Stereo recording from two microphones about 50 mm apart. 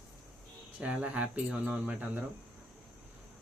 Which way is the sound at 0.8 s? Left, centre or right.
Right.